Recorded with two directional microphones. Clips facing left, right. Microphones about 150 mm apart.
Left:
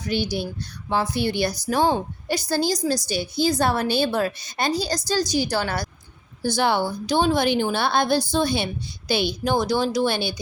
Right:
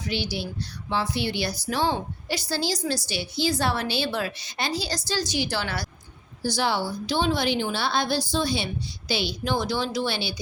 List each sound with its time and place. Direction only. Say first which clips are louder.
0.0 s a woman's voice: left 4 dB; 45° left (ahead or behind)